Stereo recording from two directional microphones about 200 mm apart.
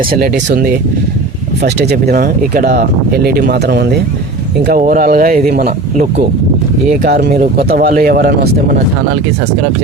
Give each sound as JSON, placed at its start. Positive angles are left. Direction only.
{"t": 0.1, "sound": "speech", "side_deg": -55}
{"t": 4.8, "sound": "speech", "side_deg": -45}
{"t": 7.3, "sound": "speech", "side_deg": -40}